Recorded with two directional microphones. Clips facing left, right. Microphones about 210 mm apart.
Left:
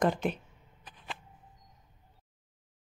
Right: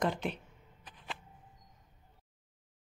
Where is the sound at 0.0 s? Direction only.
50° left (ahead or behind).